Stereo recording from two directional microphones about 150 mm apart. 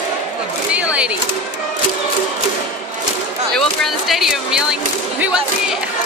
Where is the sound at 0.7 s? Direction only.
10° right (ahead or behind).